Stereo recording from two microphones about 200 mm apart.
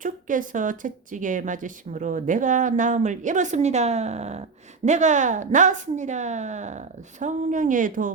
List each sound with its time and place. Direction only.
0.0 s speech: 40° right (ahead or behind)